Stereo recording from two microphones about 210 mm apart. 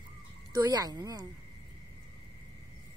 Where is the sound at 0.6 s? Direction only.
20° right (ahead or behind).